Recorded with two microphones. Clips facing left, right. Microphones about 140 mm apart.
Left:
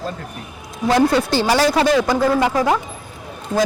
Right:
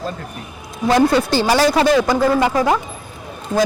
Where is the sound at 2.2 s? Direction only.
35° right (ahead or behind).